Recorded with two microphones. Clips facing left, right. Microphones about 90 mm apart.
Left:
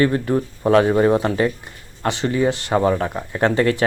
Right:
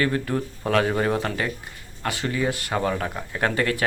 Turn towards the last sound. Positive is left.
turn(degrees=30)  # may be behind; listen again after turning